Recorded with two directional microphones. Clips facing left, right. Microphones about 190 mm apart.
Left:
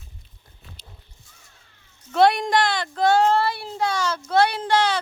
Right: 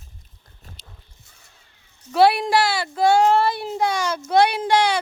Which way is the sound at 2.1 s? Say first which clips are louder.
Right 1 dB; 5° right (ahead or behind).